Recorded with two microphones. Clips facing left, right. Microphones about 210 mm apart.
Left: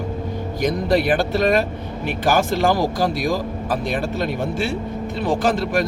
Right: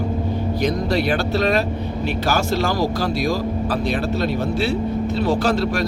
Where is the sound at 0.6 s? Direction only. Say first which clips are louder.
Left 3 dB; 50° left (ahead or behind).